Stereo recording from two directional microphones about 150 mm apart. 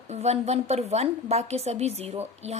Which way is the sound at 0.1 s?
45° right (ahead or behind).